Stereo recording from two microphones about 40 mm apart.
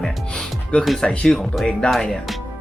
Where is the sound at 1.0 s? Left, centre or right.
Left.